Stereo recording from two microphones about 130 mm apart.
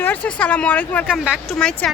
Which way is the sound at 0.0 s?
10° left (ahead or behind).